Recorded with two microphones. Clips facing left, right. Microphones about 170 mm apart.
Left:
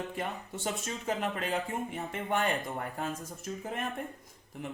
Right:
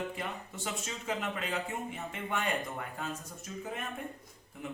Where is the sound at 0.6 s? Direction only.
35° left (ahead or behind).